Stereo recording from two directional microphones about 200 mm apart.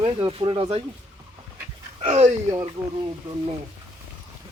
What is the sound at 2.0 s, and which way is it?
Speech, 30° right (ahead or behind).